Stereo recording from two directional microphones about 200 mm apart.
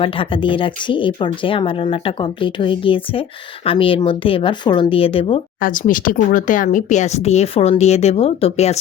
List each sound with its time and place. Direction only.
0.0 s speech: 25° left (ahead or behind)
5.5 s speech: 40° left (ahead or behind)